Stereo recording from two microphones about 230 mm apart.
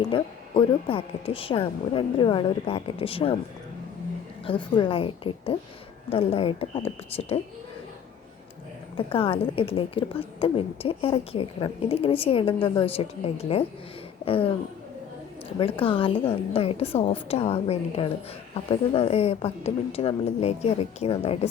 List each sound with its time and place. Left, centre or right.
0.1 s a woman's voice: left
4.4 s a woman's voice: left
9.0 s a woman's voice: left
15.8 s a woman's voice: left